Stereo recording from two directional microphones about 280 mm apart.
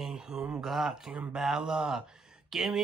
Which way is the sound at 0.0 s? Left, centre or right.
Centre.